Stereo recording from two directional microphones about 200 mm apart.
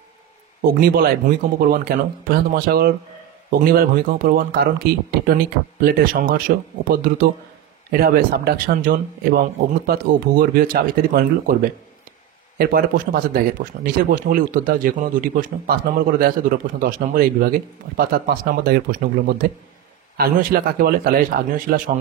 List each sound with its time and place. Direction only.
0.6 s speech: 45° right (ahead or behind)
12.5 s speech: 45° right (ahead or behind)